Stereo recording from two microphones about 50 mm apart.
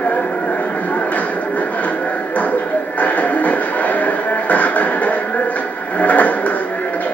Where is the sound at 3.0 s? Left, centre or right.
Left.